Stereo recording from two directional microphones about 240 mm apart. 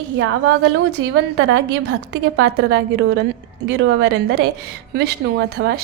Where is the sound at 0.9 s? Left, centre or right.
Right.